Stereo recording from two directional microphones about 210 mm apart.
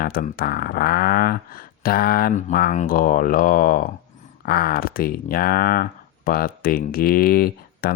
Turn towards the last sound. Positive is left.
turn(degrees=45)  # may be behind; listen again after turning